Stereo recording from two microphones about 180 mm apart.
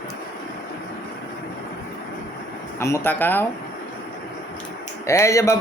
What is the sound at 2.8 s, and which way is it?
Speech, 15° left (ahead or behind).